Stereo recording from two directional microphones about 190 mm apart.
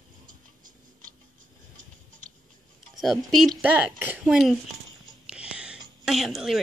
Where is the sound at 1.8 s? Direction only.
45° right (ahead or behind).